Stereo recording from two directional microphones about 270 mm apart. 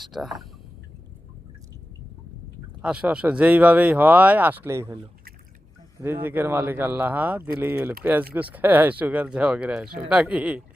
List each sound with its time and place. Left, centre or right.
0.0 s speech: centre
2.8 s speech: centre
6.0 s speech: centre